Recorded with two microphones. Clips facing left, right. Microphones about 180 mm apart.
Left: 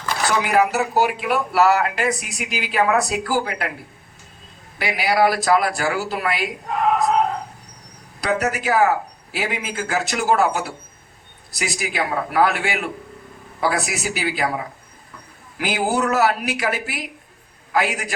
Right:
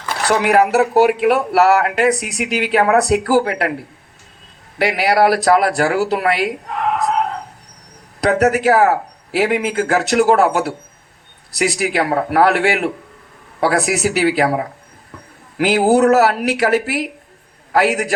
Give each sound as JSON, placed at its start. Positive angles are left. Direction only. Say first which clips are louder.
{"t": 0.3, "sound": "speech", "louder": "right 5 dB", "side_deg": -65}
{"t": 4.8, "sound": "a man's voice", "louder": "right 4 dB", "side_deg": -65}
{"t": 8.2, "sound": "a man's voice", "louder": "right 8 dB", "side_deg": -65}